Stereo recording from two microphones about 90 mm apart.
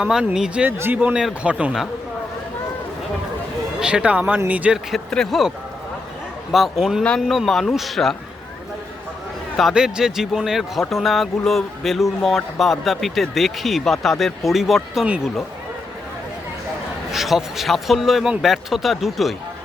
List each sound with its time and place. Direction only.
0.0 s speech: 10° right (ahead or behind)
3.8 s speech: 10° right (ahead or behind)
5.1 s speech: 5° left (ahead or behind)
6.5 s speech: centre (ahead or behind)
9.6 s speech: 5° right (ahead or behind)
17.1 s speech: 5° right (ahead or behind)